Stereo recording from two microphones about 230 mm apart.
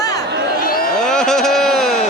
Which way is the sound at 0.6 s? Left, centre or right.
Left.